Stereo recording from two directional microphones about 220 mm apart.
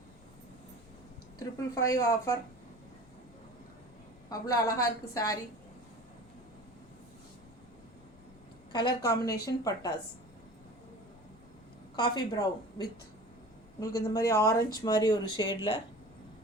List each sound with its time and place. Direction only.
1.4 s a woman's voice: 15° left (ahead or behind)
4.3 s a woman's voice: 15° left (ahead or behind)
8.7 s a woman's voice: 20° left (ahead or behind)
11.9 s a woman's voice: 20° left (ahead or behind)